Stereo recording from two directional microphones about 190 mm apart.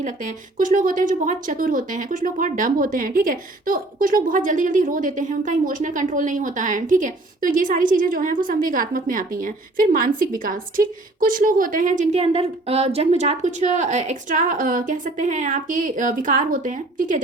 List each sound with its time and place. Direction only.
0.0 s a woman's voice: 45° right (ahead or behind)